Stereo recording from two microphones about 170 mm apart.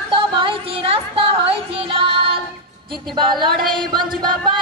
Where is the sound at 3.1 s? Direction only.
30° right (ahead or behind).